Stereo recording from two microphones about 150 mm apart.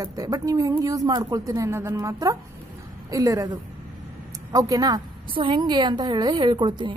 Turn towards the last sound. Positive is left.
turn(degrees=-30)  # may be behind; listen again after turning